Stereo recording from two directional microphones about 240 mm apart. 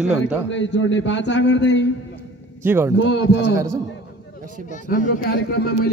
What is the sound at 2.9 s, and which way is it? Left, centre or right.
Speech, left.